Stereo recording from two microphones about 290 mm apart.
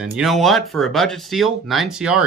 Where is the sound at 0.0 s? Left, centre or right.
Centre.